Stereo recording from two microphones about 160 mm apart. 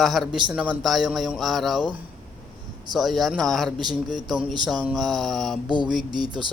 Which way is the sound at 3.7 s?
25° right (ahead or behind).